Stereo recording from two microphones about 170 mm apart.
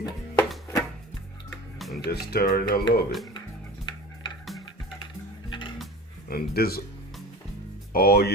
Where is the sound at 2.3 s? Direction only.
65° left (ahead or behind).